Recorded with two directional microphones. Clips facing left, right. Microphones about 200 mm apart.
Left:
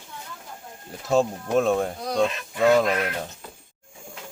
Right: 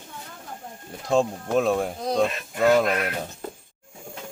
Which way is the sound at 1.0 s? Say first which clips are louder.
Even; 5° left (ahead or behind).